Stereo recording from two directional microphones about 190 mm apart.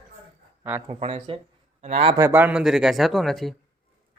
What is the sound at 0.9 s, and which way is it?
Speech, 35° right (ahead or behind).